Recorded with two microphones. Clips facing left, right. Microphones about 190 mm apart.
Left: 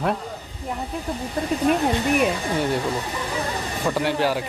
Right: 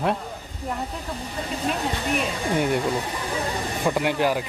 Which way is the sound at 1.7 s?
55° left (ahead or behind).